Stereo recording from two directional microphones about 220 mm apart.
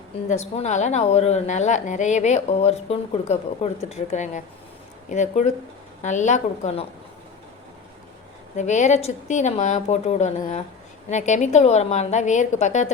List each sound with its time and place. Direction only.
0.3 s a woman's voice: 30° left (ahead or behind)
8.5 s a woman's voice: 30° left (ahead or behind)